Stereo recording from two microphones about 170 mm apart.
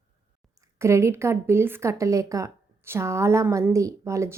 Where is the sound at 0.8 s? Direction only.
15° right (ahead or behind).